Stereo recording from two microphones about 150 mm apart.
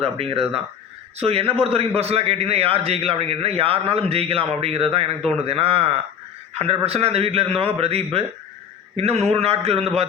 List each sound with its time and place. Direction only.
0.0 s a man's voice: 40° right (ahead or behind)